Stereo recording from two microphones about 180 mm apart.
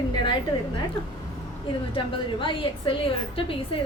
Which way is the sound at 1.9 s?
30° left (ahead or behind).